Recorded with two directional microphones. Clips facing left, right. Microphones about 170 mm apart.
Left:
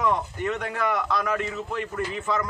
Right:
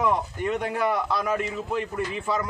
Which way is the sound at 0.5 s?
30° right (ahead or behind).